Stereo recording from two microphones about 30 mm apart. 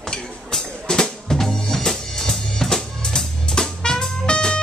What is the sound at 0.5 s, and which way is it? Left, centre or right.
Music, centre.